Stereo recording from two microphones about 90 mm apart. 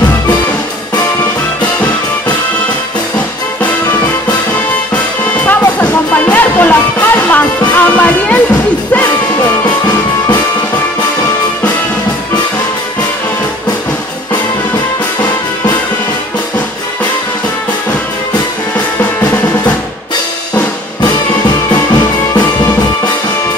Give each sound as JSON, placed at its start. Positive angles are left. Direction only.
{"t": 4.9, "sound": "music", "side_deg": 15}
{"t": 9.8, "sound": "music", "side_deg": 45}
{"t": 20.5, "sound": "music", "side_deg": 50}